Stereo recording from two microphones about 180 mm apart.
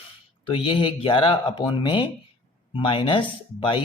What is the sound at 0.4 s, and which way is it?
A man's voice, 30° left (ahead or behind).